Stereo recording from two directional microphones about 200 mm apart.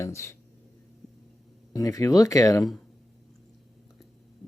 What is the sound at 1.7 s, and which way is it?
Speech, 15° left (ahead or behind).